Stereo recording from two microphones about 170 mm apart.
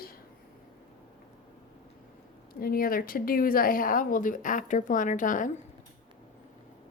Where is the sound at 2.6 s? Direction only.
60° left (ahead or behind).